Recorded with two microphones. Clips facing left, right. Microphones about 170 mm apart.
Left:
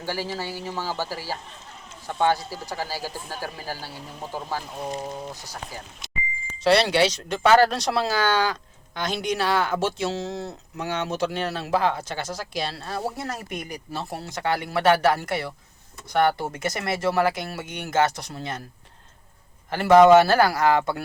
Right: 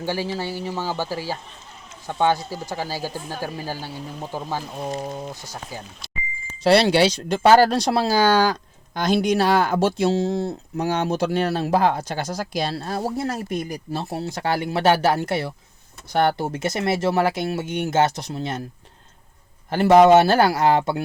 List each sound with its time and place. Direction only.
0.0 s speech: 20° right (ahead or behind)
6.6 s speech: 35° right (ahead or behind)
19.7 s speech: 30° right (ahead or behind)